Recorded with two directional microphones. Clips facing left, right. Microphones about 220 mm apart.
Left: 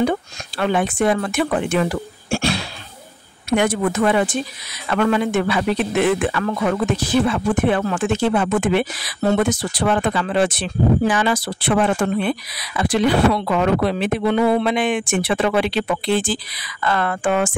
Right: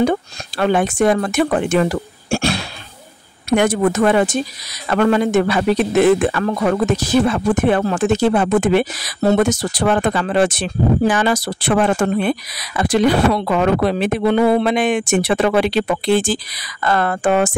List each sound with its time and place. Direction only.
0.0 s speech: 45° right (ahead or behind)